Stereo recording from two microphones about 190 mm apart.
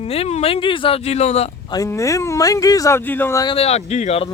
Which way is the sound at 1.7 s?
15° left (ahead or behind).